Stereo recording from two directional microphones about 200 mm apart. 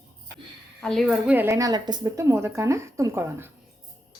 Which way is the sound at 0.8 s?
Centre (ahead or behind).